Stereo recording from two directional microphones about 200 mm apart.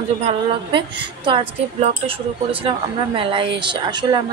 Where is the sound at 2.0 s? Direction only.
25° right (ahead or behind).